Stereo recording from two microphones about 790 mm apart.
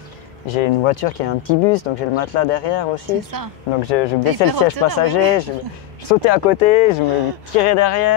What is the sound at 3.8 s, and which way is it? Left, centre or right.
Speech, left.